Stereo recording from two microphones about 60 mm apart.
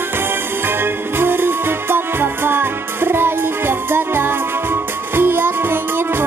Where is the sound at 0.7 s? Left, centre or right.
Right.